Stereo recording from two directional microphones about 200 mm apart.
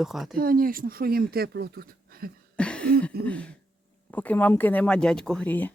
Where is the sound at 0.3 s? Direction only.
45° right (ahead or behind).